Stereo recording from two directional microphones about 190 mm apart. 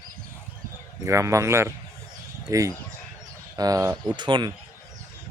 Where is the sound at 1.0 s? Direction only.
15° right (ahead or behind).